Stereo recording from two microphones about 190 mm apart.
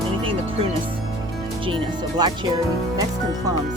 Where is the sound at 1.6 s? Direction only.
25° right (ahead or behind).